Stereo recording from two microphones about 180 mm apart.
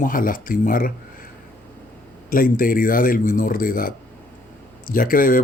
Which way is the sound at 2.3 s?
50° left (ahead or behind).